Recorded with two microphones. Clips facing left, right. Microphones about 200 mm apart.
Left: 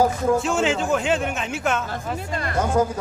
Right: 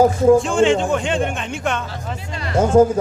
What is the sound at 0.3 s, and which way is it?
Speech, 5° left (ahead or behind).